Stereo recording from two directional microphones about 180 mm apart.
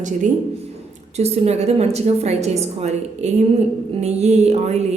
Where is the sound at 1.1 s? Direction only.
35° right (ahead or behind).